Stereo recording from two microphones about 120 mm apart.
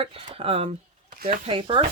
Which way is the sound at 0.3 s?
55° right (ahead or behind).